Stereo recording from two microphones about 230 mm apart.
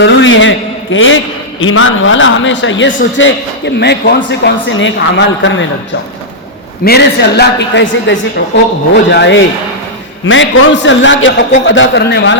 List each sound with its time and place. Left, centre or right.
0.0 s a man's voice: left
6.8 s a man's voice: left